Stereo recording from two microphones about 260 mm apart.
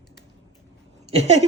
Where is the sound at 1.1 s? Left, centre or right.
Right.